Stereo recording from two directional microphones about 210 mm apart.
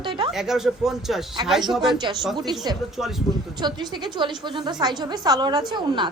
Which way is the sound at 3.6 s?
20° right (ahead or behind).